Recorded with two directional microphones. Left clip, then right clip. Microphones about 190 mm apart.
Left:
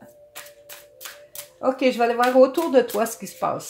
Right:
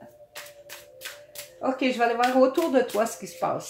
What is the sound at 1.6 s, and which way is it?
Speech, 45° left (ahead or behind).